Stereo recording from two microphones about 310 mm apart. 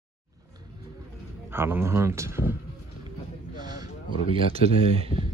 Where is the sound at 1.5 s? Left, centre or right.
Centre.